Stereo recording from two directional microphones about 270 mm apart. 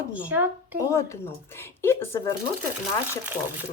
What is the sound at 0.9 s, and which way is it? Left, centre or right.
Speech, centre.